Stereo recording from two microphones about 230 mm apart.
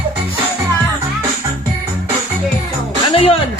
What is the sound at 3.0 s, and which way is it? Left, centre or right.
Music, left.